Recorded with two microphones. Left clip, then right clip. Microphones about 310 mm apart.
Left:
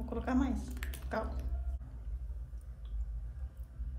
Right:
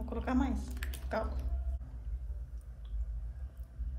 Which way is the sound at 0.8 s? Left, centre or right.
Centre.